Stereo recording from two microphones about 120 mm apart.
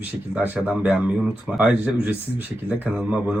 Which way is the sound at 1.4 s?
10° right (ahead or behind).